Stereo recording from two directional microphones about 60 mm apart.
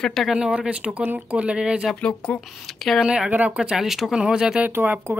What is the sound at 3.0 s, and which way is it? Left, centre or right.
Speech, centre.